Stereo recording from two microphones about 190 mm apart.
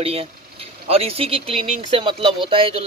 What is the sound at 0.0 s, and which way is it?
A man's voice, 30° right (ahead or behind).